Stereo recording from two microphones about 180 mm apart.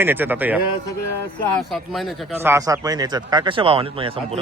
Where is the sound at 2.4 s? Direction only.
15° right (ahead or behind); by 4.4 s 30° right (ahead or behind).